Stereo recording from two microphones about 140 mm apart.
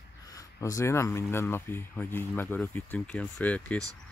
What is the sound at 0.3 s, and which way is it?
Speech, 25° left (ahead or behind).